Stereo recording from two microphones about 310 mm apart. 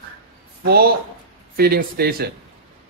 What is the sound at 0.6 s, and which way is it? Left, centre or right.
A man's voice, right.